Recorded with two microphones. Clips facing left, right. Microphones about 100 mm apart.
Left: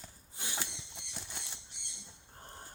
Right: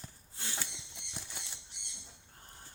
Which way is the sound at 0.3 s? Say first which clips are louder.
Left 1 dB; 15° left (ahead or behind).